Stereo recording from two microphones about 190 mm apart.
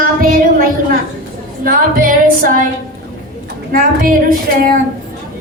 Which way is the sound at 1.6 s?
50° right (ahead or behind).